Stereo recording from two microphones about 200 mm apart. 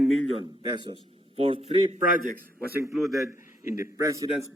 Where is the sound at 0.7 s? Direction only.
25° right (ahead or behind).